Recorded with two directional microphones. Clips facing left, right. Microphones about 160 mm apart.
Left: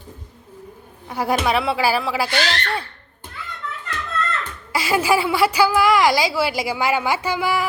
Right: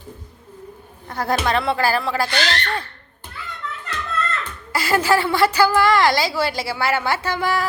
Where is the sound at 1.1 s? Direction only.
10° left (ahead or behind).